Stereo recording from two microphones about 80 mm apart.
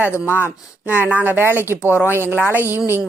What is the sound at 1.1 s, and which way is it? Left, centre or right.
Speech, right.